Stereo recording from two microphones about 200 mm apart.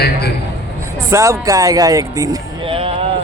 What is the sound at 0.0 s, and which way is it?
Speech, 55° left (ahead or behind).